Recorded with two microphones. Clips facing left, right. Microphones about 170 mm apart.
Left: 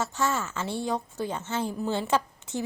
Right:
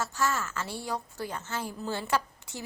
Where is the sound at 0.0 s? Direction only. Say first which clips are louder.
Left 2 dB; 25° left (ahead or behind).